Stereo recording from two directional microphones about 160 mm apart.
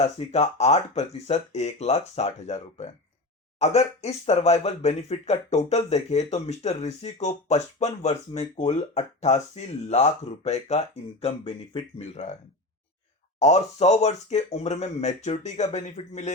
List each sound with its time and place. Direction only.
0.0 s speech: 40° left (ahead or behind)
13.4 s speech: 45° left (ahead or behind)